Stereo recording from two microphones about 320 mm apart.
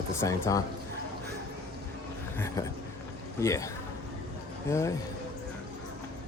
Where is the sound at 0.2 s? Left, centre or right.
Centre.